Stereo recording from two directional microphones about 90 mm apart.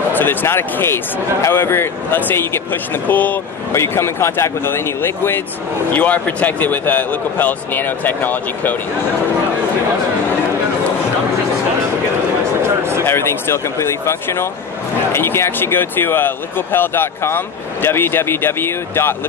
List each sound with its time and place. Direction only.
0.1 s speech: 20° left (ahead or behind)
13.0 s speech: 25° left (ahead or behind)